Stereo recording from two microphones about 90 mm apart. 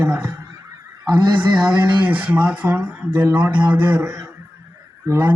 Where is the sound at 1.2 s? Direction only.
55° right (ahead or behind).